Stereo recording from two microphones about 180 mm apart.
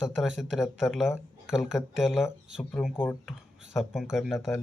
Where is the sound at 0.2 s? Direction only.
Centre (ahead or behind).